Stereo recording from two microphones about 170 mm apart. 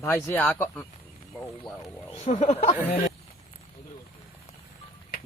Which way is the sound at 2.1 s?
40° left (ahead or behind).